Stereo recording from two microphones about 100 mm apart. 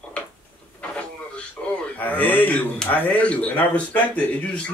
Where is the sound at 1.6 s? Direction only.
10° left (ahead or behind).